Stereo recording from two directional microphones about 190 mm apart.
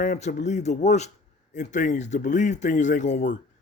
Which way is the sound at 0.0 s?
40° left (ahead or behind).